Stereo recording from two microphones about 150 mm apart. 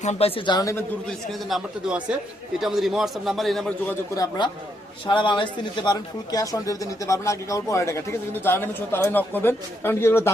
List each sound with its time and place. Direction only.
0.0 s a man's voice: 45° left (ahead or behind)
0.6 s speech: 20° left (ahead or behind)
1.0 s a man's voice: centre (ahead or behind)
4.1 s speech: 25° left (ahead or behind)